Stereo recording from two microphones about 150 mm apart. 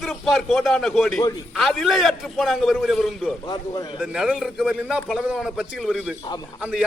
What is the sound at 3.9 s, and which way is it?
A man's voice, 5° right (ahead or behind).